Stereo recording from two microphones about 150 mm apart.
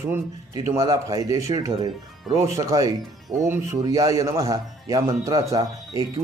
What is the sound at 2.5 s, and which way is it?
Speech, 25° right (ahead or behind).